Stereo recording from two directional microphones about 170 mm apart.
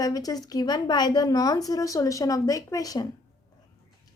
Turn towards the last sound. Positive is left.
turn(degrees=20)  # may be behind; listen again after turning